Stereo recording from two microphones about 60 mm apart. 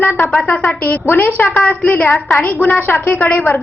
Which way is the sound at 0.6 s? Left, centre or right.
Left.